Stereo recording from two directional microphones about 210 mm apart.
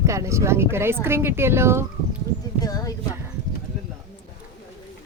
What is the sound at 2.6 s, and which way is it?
Speech, 15° left (ahead or behind).